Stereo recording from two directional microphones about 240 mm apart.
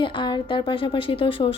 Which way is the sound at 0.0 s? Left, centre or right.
Centre.